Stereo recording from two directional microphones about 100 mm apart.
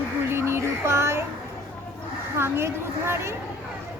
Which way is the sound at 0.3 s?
25° right (ahead or behind).